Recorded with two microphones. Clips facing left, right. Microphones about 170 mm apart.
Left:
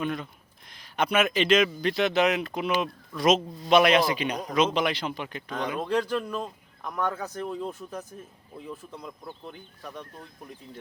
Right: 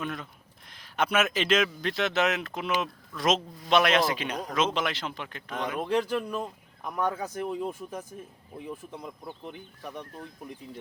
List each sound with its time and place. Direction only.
0.0 s a man's voice: centre (ahead or behind); by 10.1 s 15° right (ahead or behind)